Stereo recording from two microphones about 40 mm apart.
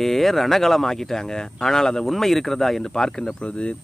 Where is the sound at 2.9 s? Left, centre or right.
Centre.